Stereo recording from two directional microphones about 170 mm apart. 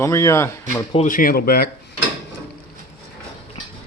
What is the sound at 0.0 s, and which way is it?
Speech, 15° left (ahead or behind).